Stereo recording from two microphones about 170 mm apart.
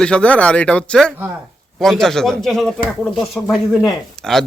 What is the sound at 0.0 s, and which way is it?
A man's voice, 5° left (ahead or behind).